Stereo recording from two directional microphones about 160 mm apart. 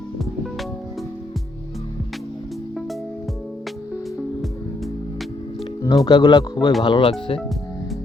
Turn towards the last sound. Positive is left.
turn(degrees=35)  # may be behind; listen again after turning